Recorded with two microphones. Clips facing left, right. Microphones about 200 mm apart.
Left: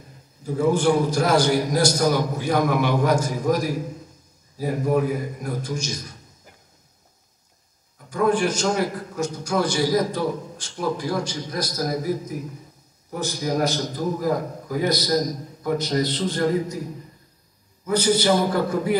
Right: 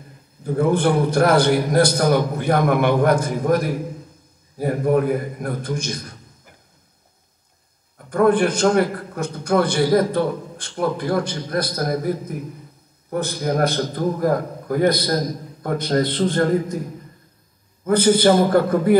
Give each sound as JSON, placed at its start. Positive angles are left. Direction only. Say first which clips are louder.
{"t": 0.4, "sound": "a man's voice", "louder": "right 2 dB", "side_deg": -55}
{"t": 8.1, "sound": "a man's voice", "louder": "right 4 dB", "side_deg": -55}
{"t": 17.8, "sound": "a man's voice", "louder": "right 5 dB", "side_deg": -55}